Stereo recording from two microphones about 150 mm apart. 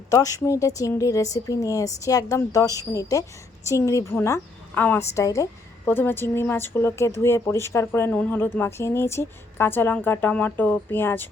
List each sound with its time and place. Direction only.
0.1 s a woman's voice: 20° left (ahead or behind)